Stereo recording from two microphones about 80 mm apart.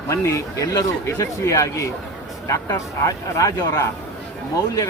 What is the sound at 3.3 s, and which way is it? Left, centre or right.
Speech, left.